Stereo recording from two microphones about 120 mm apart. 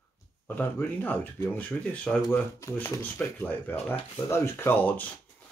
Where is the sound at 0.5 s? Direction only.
15° left (ahead or behind).